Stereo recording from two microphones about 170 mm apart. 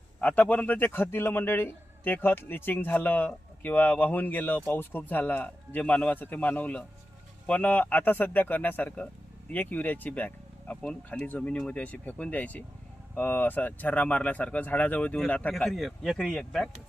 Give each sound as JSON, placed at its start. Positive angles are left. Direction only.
{"t": 0.2, "sound": "a man's voice", "side_deg": 10}